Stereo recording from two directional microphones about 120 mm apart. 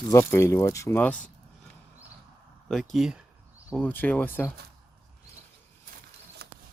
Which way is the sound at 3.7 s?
15° left (ahead or behind).